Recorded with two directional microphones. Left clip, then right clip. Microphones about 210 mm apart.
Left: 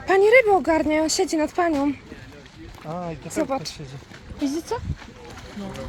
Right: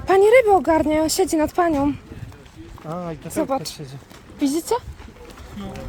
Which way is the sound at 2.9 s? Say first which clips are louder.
Right 1 dB; 55° right (ahead or behind).